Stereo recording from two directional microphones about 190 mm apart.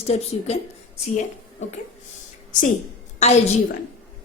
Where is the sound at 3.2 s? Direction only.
35° left (ahead or behind).